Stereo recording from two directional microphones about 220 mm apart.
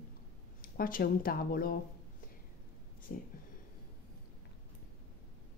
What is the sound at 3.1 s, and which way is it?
Speech, 40° left (ahead or behind).